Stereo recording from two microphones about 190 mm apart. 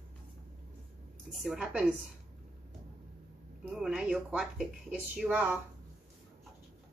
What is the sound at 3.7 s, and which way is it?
Speech, 5° right (ahead or behind).